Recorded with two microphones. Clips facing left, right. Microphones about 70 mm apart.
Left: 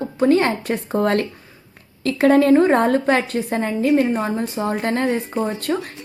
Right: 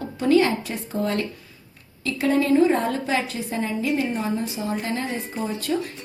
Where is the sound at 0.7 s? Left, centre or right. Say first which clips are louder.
Left 6 dB; left.